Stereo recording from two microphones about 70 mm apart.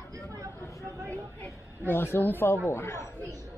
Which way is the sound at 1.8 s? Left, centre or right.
Left.